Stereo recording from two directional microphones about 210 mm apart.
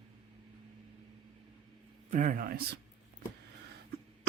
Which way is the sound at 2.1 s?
35° right (ahead or behind).